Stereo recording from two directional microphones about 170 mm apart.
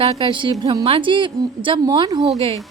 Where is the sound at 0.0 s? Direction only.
30° right (ahead or behind).